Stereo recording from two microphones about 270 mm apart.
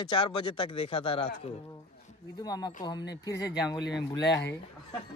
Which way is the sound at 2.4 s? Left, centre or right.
Centre.